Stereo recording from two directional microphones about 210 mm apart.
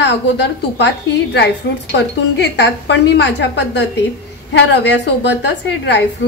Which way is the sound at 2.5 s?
55° left (ahead or behind).